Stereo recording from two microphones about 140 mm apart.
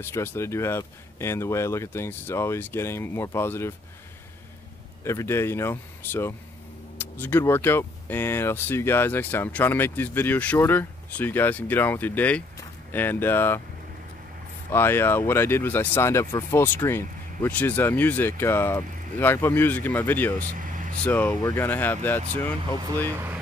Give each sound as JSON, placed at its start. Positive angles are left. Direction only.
{"t": 0.0, "sound": "speech", "side_deg": 15}
{"t": 5.0, "sound": "speech", "side_deg": 20}
{"t": 14.7, "sound": "speech", "side_deg": 15}